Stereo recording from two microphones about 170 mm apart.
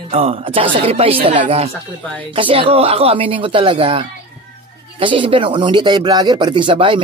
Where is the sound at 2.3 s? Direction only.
30° right (ahead or behind).